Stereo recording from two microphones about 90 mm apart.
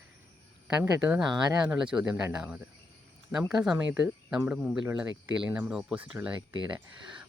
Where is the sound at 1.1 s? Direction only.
5° right (ahead or behind).